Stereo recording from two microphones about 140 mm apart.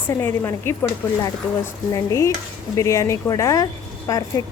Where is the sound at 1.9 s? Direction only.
20° left (ahead or behind).